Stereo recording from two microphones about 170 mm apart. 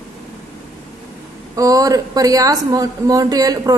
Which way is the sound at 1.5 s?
20° right (ahead or behind).